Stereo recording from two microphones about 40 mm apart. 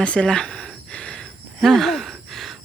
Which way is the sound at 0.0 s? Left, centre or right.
Left.